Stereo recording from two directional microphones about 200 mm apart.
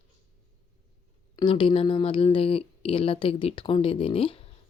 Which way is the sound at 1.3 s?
25° left (ahead or behind).